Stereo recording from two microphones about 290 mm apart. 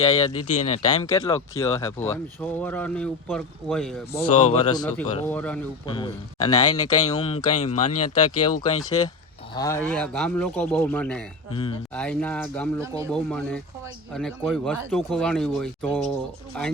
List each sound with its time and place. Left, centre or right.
0.3 s speech: left
1.0 s speech: centre
4.4 s speech: left
4.7 s speech: centre
5.8 s speech: centre
7.9 s speech: left
8.6 s speech: centre
11.5 s speech: centre
11.9 s speech: centre
12.8 s speech: centre
13.1 s speech: centre